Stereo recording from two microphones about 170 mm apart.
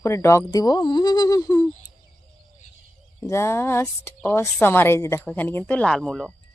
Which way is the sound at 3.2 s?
15° left (ahead or behind).